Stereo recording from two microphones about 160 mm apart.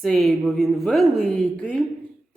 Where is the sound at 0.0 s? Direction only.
Centre (ahead or behind).